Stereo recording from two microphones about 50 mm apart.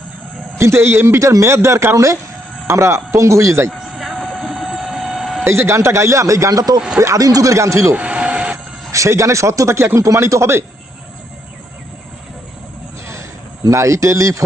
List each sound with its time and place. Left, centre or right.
0.6 s a man's voice: right
4.7 s vehicle: centre
5.1 s a sound: centre
5.5 s a man's voice: right
7.9 s a sound: right
8.9 s a man's voice: right
13.7 s a man's voice: right